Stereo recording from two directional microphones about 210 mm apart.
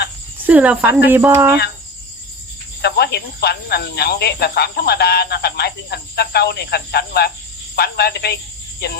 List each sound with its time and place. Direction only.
0.4 s speech: 5° right (ahead or behind)
2.8 s speech: 50° left (ahead or behind)